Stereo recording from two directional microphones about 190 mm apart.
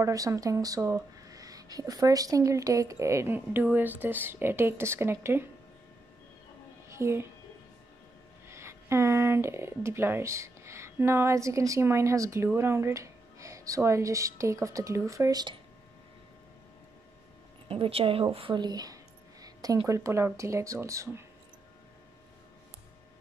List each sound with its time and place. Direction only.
0.0 s speech: 15° right (ahead or behind)
6.9 s speech: 15° right (ahead or behind)
8.5 s speech: 15° right (ahead or behind)
17.6 s speech: 30° right (ahead or behind)
19.4 s a sound: 20° right (ahead or behind)
19.9 s speech: 15° right (ahead or behind)